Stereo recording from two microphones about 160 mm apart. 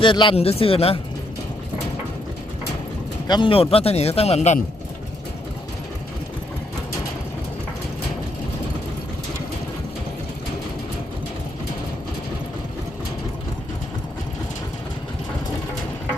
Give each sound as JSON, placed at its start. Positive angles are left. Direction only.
{"t": 0.0, "sound": "speech", "side_deg": 30}
{"t": 3.2, "sound": "speech", "side_deg": 30}